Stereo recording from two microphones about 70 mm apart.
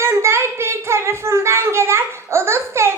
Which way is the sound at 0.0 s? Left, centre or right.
Right.